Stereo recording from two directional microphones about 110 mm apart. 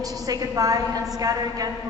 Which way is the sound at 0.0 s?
35° right (ahead or behind).